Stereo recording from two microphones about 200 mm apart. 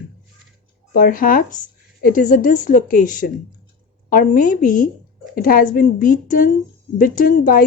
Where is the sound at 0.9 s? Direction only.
45° left (ahead or behind).